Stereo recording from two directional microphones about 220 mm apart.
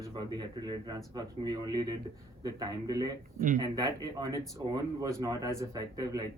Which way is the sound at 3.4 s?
35° right (ahead or behind).